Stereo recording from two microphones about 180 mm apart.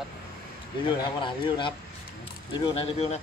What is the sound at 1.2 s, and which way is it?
Speech, 25° left (ahead or behind).